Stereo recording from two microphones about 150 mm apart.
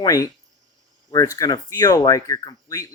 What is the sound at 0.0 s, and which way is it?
Speech, 25° left (ahead or behind).